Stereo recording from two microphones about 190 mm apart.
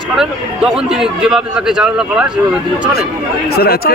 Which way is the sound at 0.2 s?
Centre (ahead or behind).